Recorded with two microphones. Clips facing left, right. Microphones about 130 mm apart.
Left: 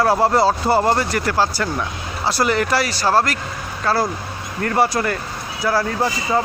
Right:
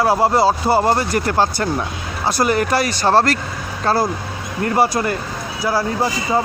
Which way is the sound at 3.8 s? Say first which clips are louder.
Right 2 dB; 20° right (ahead or behind).